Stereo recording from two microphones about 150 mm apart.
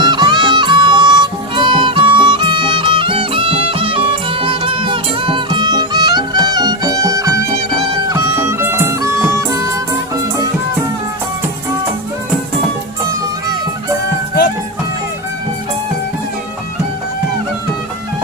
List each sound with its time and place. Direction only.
0.0 s music: 30° right (ahead or behind)